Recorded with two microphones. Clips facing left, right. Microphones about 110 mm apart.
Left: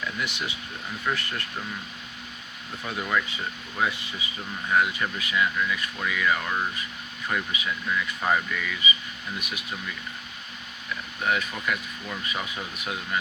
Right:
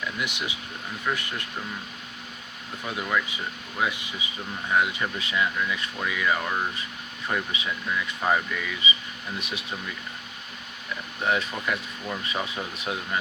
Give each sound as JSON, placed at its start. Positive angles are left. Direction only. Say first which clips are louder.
{"t": 0.2, "sound": "speech", "louder": "even", "side_deg": -15}
{"t": 2.8, "sound": "speech", "louder": "even", "side_deg": -15}
{"t": 7.9, "sound": "speech", "louder": "even", "side_deg": -10}
{"t": 8.8, "sound": "speech", "louder": "even", "side_deg": -25}
{"t": 11.2, "sound": "speech", "louder": "right 1 dB", "side_deg": -25}